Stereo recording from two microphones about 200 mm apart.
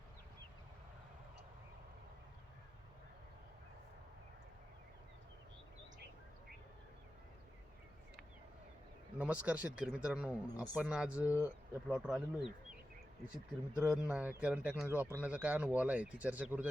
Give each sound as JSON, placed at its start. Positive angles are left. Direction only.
{"t": 9.1, "sound": "speech", "side_deg": -5}
{"t": 13.8, "sound": "speech", "side_deg": -5}